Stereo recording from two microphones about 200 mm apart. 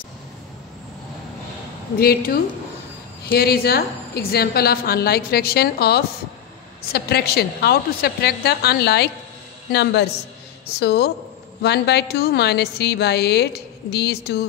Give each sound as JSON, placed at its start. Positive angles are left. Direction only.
{"t": 2.0, "sound": "a woman's voice", "side_deg": 50}